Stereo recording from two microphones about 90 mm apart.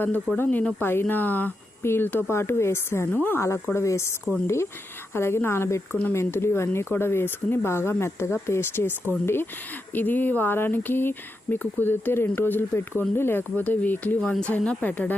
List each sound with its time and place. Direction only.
0.4 s speech: 10° left (ahead or behind)
0.8 s speech: 25° left (ahead or behind)